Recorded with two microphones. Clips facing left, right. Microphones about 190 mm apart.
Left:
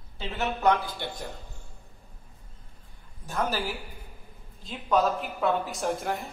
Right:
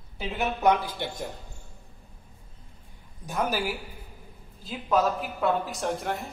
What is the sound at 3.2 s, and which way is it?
A woman's voice, 15° right (ahead or behind).